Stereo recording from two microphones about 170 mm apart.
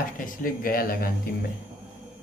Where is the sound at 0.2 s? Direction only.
55° left (ahead or behind).